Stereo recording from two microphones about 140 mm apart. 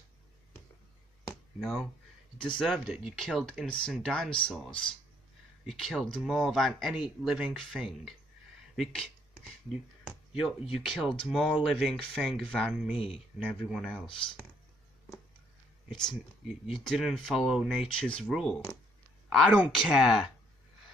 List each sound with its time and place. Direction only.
1.3 s a sound: centre (ahead or behind)
2.3 s speech: 35° left (ahead or behind)
2.6 s speech: 5° right (ahead or behind)
8.7 s a sound: 5° left (ahead or behind)
10.8 s speech: centre (ahead or behind)
12.9 s speech: 40° left (ahead or behind)
13.5 s speech: 5° left (ahead or behind)
15.9 s speech: centre (ahead or behind)